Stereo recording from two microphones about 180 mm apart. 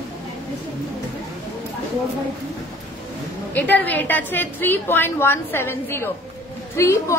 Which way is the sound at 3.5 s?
10° left (ahead or behind).